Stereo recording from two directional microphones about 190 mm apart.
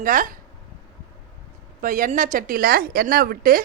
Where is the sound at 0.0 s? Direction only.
45° right (ahead or behind).